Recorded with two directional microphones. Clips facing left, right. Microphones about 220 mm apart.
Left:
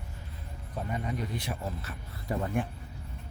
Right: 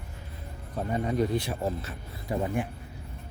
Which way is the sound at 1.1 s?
30° right (ahead or behind).